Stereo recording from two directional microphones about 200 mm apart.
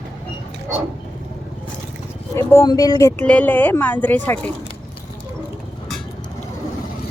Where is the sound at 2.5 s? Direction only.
15° left (ahead or behind).